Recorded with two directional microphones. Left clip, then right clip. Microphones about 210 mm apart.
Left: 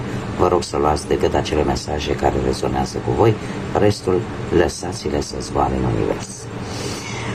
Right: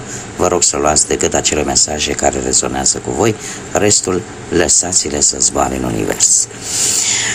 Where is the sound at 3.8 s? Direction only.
40° right (ahead or behind).